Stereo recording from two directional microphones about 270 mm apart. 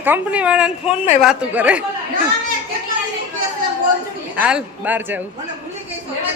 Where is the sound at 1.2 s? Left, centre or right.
Centre.